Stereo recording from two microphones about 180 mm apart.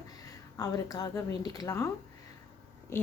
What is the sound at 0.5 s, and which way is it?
Speech, 20° left (ahead or behind).